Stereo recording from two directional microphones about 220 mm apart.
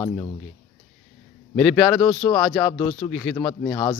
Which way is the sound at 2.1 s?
20° left (ahead or behind).